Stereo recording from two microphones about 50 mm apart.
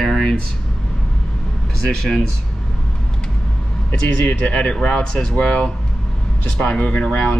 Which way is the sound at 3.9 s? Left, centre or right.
Left.